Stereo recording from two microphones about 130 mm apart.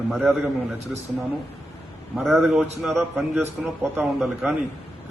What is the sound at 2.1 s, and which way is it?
Speech, centre (ahead or behind).